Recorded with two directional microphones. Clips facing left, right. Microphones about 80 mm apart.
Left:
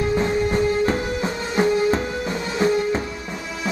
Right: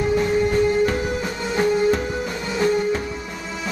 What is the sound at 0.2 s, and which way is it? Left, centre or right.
Music, left.